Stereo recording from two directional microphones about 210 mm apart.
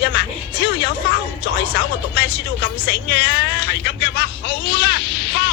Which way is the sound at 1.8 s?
55° left (ahead or behind).